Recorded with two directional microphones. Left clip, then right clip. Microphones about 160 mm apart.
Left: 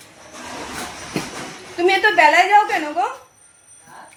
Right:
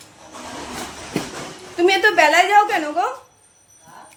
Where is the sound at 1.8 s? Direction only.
10° right (ahead or behind).